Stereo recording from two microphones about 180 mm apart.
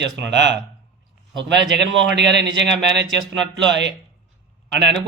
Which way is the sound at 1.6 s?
75° right (ahead or behind).